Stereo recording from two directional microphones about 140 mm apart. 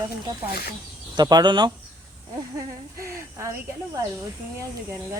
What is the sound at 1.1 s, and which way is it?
Speech, 30° right (ahead or behind).